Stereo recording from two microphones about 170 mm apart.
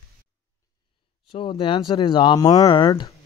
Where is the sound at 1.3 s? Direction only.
35° left (ahead or behind).